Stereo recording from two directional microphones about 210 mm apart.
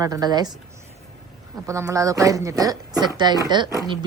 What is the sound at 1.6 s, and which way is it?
Speech, 15° right (ahead or behind).